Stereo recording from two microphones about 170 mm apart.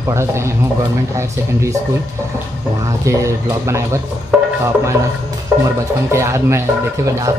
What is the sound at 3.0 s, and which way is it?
Speech, 20° right (ahead or behind).